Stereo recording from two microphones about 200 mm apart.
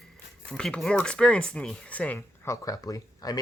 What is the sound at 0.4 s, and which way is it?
Speech, 5° left (ahead or behind).